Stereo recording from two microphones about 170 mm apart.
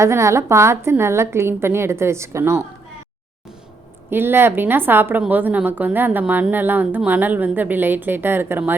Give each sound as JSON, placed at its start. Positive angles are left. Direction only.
{"t": 0.0, "sound": "a woman's voice", "side_deg": -15}
{"t": 4.1, "sound": "a woman's voice", "side_deg": -15}